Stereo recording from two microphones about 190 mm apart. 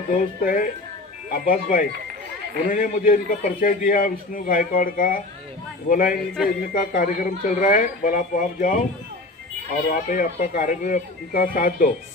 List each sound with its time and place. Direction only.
0.1 s a man's voice: 45° left (ahead or behind)
9.8 s a man's voice: 45° left (ahead or behind)